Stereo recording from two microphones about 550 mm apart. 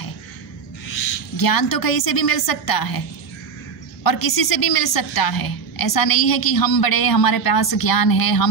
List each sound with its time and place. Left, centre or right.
1.3 s a woman's voice: left
4.0 s a woman's voice: left